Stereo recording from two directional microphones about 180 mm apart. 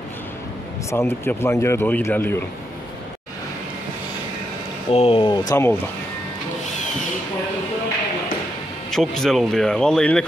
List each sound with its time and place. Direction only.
0.9 s speech: 15° left (ahead or behind)
4.9 s speech: 30° left (ahead or behind)
5.5 s speech: 15° left (ahead or behind)
8.9 s speech: centre (ahead or behind)